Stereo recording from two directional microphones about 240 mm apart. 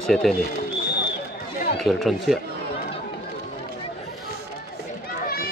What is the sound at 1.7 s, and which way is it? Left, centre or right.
Speech, centre.